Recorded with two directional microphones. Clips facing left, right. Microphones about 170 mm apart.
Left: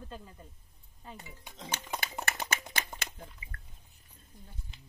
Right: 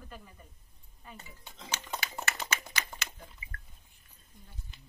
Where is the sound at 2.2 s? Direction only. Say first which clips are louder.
Left 1 dB; 50° left (ahead or behind).